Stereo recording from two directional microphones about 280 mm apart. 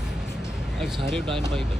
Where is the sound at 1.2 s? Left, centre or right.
Centre.